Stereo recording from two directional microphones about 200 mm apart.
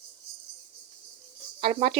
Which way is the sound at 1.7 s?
30° right (ahead or behind).